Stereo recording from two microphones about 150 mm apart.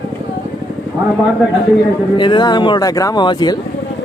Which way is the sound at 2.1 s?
30° left (ahead or behind).